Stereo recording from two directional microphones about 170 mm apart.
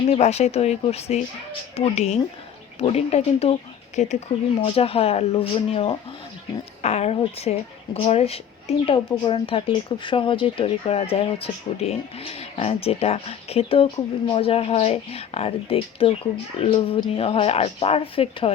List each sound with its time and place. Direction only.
0.1 s speech: 40° left (ahead or behind)